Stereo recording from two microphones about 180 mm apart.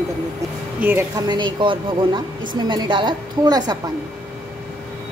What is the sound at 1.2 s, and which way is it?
A woman's voice, 25° right (ahead or behind).